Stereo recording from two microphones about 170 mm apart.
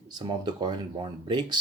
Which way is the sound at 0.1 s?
25° right (ahead or behind).